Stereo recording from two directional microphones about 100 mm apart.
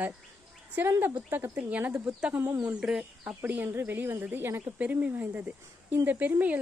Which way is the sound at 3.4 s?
20° right (ahead or behind).